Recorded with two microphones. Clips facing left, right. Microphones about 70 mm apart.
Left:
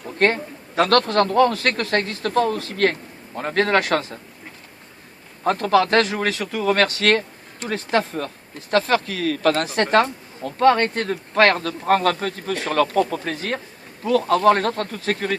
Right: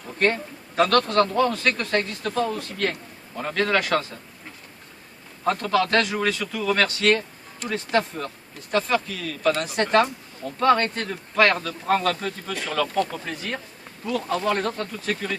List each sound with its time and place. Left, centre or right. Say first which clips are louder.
0.2 s a man's voice: left 3 dB; left
2.6 s a man's voice: left 6 dB; left
3.4 s a man's voice: left 4 dB; left
5.4 s a man's voice: left 4 dB; left
6.2 s a man's voice: left 1 dB; left
6.5 s a man's voice: left 4 dB; left
8.7 s a man's voice: left 4 dB; left
10.6 s a man's voice: left 3 dB; left